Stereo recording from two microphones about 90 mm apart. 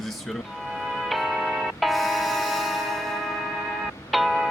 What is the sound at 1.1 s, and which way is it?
Music, centre (ahead or behind).